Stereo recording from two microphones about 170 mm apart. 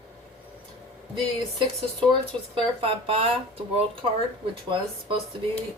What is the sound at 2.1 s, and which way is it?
A woman's voice, 30° right (ahead or behind).